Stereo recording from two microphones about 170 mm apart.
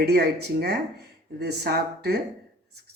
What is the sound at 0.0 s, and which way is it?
Speech, 70° right (ahead or behind).